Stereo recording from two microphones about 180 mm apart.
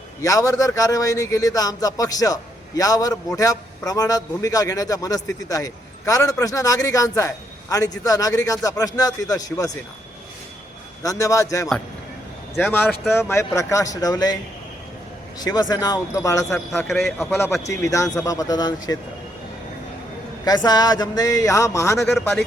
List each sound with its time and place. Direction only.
0.2 s a man's voice: 20° left (ahead or behind)
11.0 s speech: 20° left (ahead or behind)
13.1 s speech: 15° left (ahead or behind)
15.4 s a man's voice: 20° left (ahead or behind)
16.9 s a man's voice: centre (ahead or behind)
17.8 s a man's voice: 20° left (ahead or behind)
20.4 s a man's voice: 20° left (ahead or behind)